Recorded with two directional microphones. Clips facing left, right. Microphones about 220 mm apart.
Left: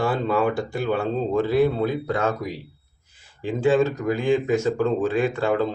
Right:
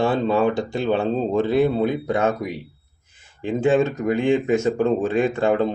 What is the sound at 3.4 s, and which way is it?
Speech, 20° right (ahead or behind).